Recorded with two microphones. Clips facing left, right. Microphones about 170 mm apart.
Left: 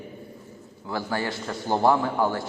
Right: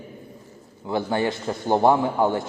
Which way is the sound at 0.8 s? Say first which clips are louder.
Right 5 dB; 20° right (ahead or behind).